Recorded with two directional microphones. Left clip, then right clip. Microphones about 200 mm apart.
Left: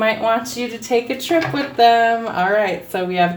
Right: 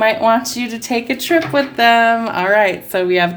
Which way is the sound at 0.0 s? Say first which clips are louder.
Right 4 dB; 55° right (ahead or behind).